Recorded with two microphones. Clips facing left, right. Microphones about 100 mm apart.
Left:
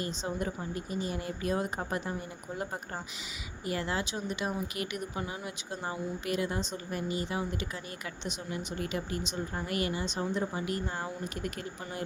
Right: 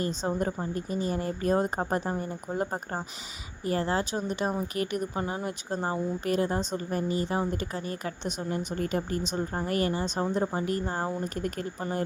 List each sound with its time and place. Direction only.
0.0 s a woman's voice: 40° right (ahead or behind)